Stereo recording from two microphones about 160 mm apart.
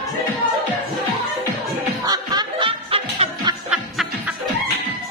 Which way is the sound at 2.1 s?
25° right (ahead or behind).